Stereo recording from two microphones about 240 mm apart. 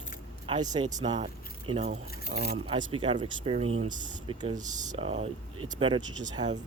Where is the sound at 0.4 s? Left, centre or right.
Centre.